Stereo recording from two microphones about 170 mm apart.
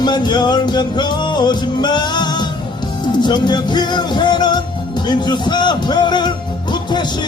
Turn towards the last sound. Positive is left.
turn(degrees=25)  # may be behind; listen again after turning